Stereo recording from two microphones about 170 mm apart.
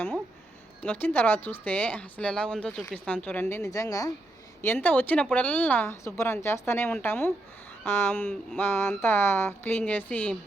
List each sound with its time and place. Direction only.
0.8 s speech: 10° left (ahead or behind)